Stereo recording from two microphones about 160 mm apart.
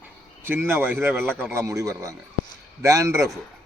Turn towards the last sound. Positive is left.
turn(degrees=-20)  # may be behind; listen again after turning